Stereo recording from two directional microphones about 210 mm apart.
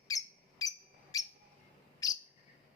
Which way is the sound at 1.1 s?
15° left (ahead or behind).